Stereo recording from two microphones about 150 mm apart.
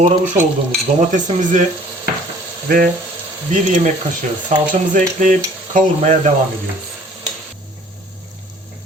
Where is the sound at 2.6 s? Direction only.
75° right (ahead or behind).